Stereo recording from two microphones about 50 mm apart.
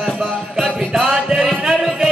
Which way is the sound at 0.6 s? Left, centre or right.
Centre.